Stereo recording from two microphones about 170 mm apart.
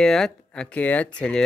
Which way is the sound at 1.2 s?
5° left (ahead or behind).